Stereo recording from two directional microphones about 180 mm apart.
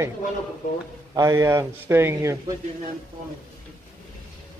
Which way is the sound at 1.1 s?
20° right (ahead or behind).